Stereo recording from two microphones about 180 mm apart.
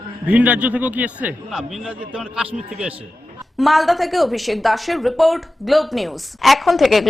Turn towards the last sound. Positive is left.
turn(degrees=0)  # may be behind; listen again after turning